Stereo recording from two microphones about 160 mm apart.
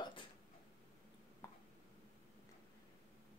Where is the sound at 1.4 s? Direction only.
20° left (ahead or behind).